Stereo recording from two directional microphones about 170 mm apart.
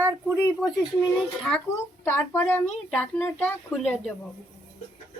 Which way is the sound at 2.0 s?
10° left (ahead or behind).